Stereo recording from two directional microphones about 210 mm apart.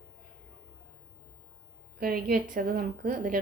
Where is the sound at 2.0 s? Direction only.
45° right (ahead or behind).